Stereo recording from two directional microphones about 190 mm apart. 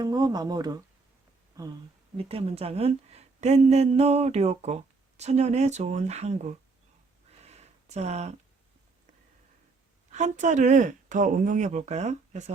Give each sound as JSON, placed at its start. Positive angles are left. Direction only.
{"t": 0.0, "sound": "speech", "side_deg": -20}
{"t": 2.1, "sound": "a woman's voice", "side_deg": -30}
{"t": 7.4, "sound": "a sound", "side_deg": -35}
{"t": 10.1, "sound": "a woman's voice", "side_deg": -35}